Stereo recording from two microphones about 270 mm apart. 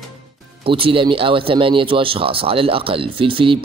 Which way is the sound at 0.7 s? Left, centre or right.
Centre.